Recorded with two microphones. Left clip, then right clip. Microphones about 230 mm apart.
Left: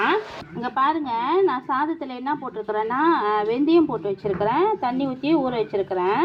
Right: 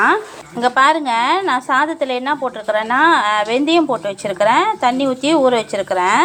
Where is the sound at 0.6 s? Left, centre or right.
Right.